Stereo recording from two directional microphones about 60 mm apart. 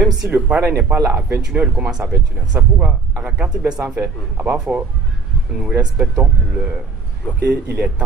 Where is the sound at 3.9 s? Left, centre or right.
Right.